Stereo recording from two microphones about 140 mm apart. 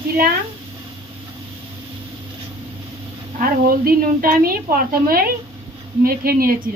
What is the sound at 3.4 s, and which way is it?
A woman's voice, 90° right.